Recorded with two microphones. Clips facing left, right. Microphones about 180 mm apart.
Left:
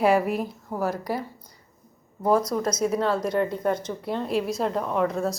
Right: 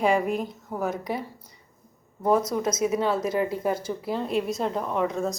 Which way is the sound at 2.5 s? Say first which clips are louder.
Even; 5° right (ahead or behind).